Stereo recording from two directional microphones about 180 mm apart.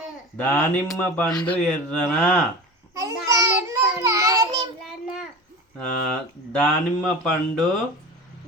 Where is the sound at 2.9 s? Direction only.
20° right (ahead or behind).